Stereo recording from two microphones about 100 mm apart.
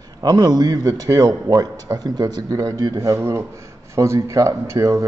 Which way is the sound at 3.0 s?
30° right (ahead or behind).